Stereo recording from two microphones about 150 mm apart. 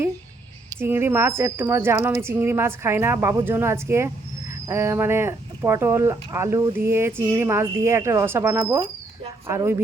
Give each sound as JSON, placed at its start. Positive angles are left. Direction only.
{"t": 0.8, "sound": "speech", "side_deg": -15}